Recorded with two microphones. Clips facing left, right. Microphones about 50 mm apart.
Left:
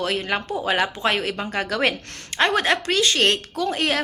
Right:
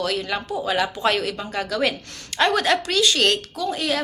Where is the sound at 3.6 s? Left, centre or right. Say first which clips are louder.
Left 3 dB; left.